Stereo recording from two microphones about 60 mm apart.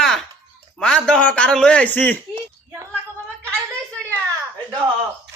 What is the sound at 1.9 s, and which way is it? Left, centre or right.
Speech, left.